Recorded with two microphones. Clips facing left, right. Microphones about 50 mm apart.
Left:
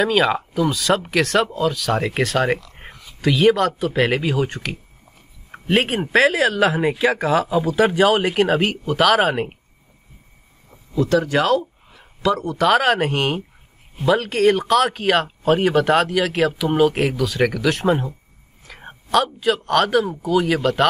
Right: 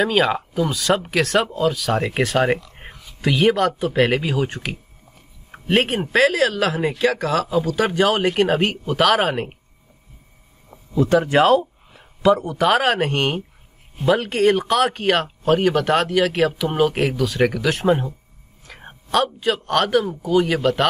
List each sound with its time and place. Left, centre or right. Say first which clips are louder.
0.0 s speech: left 1 dB; centre
11.0 s speech: right 2 dB; right
12.6 s a man's voice: left 1 dB; centre